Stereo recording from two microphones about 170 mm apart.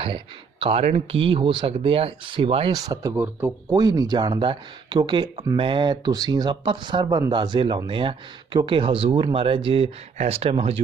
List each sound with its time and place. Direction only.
0.6 s speech: 35° right (ahead or behind)
2.7 s speech: 20° right (ahead or behind)